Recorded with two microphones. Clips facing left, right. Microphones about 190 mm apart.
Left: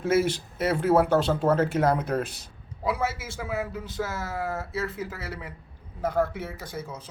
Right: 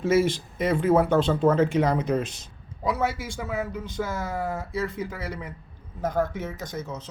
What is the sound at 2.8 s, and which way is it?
Speech, 5° left (ahead or behind).